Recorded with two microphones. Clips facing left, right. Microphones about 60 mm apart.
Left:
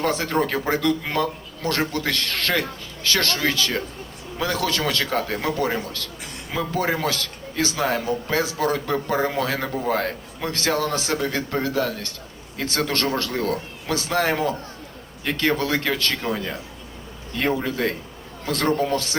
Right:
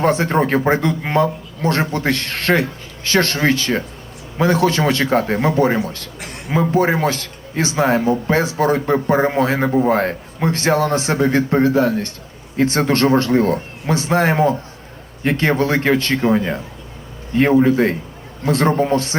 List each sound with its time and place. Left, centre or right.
0.0 s a man's voice: right